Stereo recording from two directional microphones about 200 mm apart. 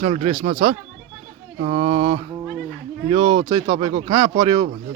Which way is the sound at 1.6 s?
30° right (ahead or behind).